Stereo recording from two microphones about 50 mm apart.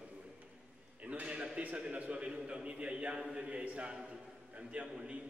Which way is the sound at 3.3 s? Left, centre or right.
Right.